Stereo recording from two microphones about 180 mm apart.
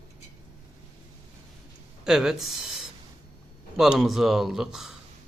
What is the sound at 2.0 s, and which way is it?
A man's voice, 5° right (ahead or behind).